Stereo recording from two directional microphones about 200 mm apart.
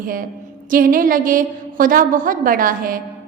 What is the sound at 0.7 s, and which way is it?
A woman's voice, 45° right (ahead or behind).